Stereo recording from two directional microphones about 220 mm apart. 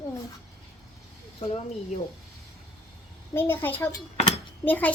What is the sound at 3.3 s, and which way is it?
A child's voice, 10° left (ahead or behind).